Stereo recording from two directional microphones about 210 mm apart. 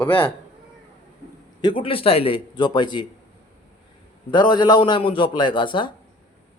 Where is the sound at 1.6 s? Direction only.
25° left (ahead or behind).